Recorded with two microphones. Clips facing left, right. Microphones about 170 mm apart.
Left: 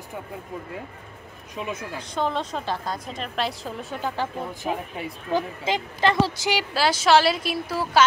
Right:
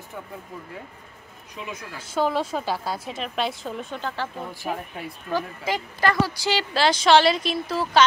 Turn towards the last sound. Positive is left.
turn(degrees=10)  # may be behind; listen again after turning